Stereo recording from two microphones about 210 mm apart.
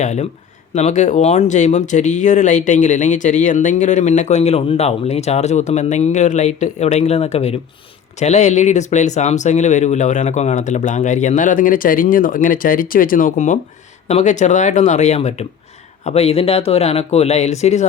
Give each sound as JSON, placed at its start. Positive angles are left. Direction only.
{"t": 0.0, "sound": "speech", "side_deg": 35}